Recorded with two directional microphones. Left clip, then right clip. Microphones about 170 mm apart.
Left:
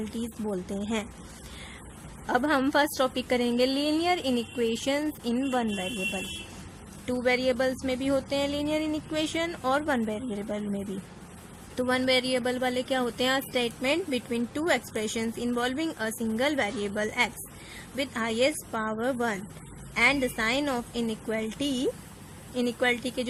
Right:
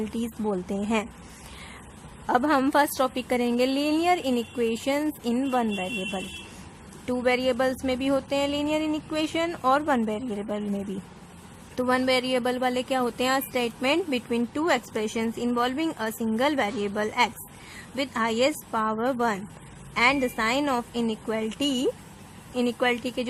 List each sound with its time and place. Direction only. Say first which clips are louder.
0.2 s speech: right 3 dB; 25° right (ahead or behind)
2.2 s a woman's voice: right 3 dB; 15° right (ahead or behind)
11.8 s a woman's voice: right 2 dB; 20° right (ahead or behind)